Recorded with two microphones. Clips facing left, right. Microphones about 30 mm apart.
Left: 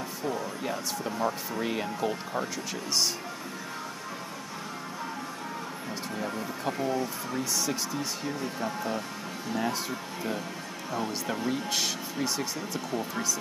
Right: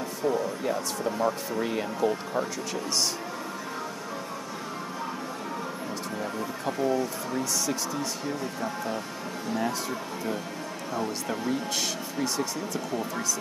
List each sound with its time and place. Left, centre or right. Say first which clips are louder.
0.2 s speech: right 6 dB; centre
6.1 s speech: even; centre